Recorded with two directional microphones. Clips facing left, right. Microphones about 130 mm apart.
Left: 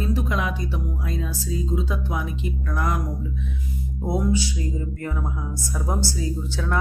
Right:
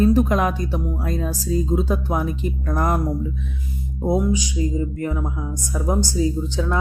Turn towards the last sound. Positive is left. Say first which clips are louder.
# right 6 dB
turn(degrees=-20)  # may be behind; listen again after turning